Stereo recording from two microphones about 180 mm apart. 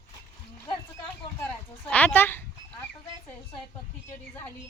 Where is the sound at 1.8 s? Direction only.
10° left (ahead or behind).